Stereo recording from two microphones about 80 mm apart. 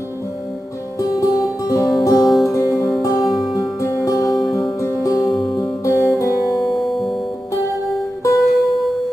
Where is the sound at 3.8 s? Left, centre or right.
Left.